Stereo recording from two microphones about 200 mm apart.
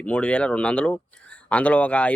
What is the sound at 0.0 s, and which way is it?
Speech, 5° left (ahead or behind).